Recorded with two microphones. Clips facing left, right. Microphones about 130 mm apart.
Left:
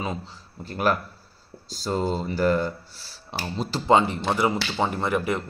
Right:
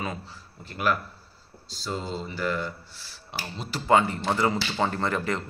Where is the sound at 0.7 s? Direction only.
35° left (ahead or behind).